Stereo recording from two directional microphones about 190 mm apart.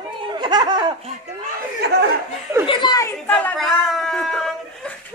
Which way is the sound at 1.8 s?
60° right (ahead or behind).